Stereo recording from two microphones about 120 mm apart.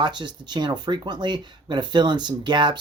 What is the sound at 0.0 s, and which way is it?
Speech, 40° right (ahead or behind).